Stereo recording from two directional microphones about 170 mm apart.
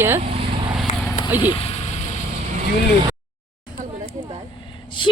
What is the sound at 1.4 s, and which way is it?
Speech, 30° left (ahead or behind).